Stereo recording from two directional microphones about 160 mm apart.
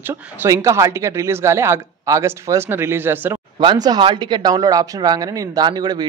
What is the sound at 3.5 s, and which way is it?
Speech, 25° right (ahead or behind).